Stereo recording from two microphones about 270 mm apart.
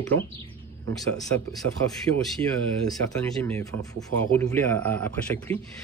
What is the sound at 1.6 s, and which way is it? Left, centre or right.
Speech, right.